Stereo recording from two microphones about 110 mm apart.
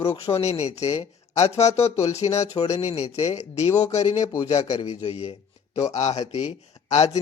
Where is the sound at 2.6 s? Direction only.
70° left (ahead or behind).